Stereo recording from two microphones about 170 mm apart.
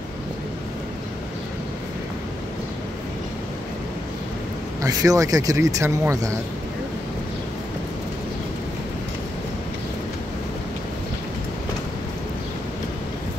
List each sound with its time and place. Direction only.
4.8 s speech: 20° right (ahead or behind)